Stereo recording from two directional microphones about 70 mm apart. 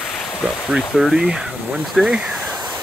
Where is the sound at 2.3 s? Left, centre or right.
Centre.